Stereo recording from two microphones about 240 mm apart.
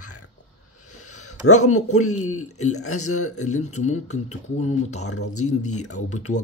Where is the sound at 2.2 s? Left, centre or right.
Left.